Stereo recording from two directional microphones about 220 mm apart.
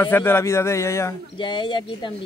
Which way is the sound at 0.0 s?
10° left (ahead or behind).